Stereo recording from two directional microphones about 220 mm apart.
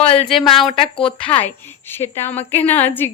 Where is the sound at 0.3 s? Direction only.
Centre (ahead or behind).